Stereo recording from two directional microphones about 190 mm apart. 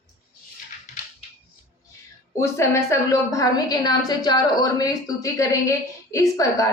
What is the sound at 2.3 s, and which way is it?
A woman's voice, 15° left (ahead or behind).